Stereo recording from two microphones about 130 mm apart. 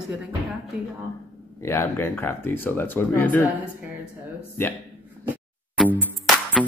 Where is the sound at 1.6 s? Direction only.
20° left (ahead or behind).